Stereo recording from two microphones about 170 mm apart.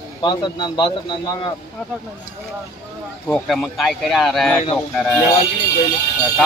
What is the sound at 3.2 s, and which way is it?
Speech, 5° left (ahead or behind).